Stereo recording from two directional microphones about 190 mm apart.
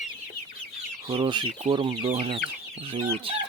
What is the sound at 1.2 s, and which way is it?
Chicken, 30° right (ahead or behind).